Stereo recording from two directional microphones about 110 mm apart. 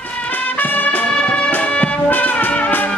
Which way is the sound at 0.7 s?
15° left (ahead or behind).